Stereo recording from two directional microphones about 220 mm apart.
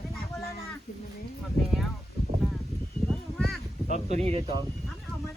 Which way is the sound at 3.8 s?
30° right (ahead or behind).